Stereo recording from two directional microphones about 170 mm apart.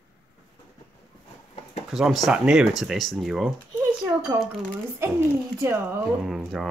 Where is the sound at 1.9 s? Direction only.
Centre (ahead or behind).